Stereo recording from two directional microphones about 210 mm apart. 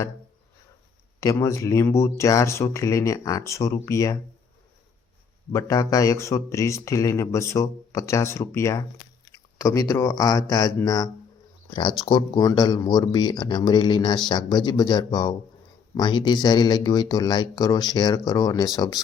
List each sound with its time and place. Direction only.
1.2 s speech: 15° left (ahead or behind)
5.5 s speech: 15° left (ahead or behind)